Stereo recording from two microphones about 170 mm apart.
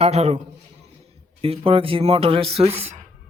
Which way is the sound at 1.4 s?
35° right (ahead or behind).